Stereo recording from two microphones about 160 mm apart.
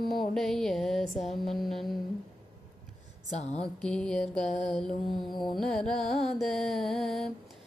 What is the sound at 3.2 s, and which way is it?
Mantra, 45° left (ahead or behind).